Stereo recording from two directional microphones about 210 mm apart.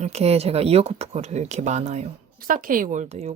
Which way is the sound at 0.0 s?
30° right (ahead or behind).